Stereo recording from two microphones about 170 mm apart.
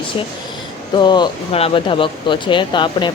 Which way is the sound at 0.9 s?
25° left (ahead or behind).